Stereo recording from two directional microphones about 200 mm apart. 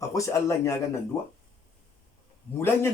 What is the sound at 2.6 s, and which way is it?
Speech, 10° left (ahead or behind).